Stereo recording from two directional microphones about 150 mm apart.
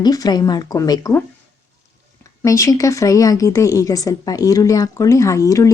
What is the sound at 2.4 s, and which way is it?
Speech, 20° left (ahead or behind).